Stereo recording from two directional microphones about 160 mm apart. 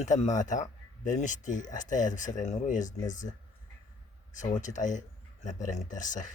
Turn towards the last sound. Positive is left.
turn(degrees=50)  # may be behind; listen again after turning